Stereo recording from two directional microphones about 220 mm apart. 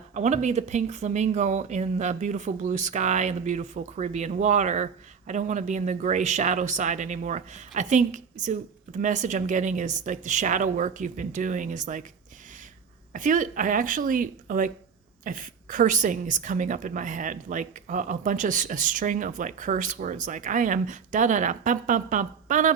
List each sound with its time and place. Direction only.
0.1 s speech: 30° right (ahead or behind)
13.1 s speech: 35° right (ahead or behind)